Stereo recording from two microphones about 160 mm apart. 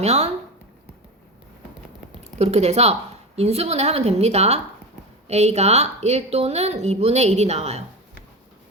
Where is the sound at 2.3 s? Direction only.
40° right (ahead or behind).